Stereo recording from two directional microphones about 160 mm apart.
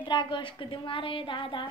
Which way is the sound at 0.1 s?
30° left (ahead or behind).